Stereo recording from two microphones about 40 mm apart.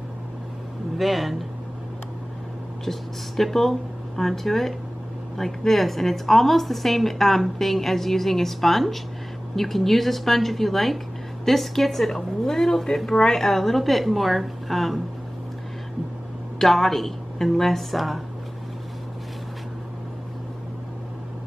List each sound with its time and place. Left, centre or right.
0.9 s a woman's voice: centre
2.8 s a woman's voice: centre
16.5 s a woman's voice: centre